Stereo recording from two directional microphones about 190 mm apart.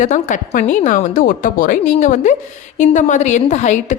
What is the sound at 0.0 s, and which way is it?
A woman's voice, 40° left (ahead or behind).